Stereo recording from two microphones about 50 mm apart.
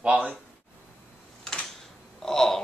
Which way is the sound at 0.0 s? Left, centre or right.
Right.